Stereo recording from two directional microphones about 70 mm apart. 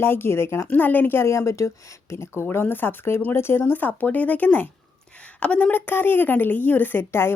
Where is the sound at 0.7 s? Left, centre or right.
Left.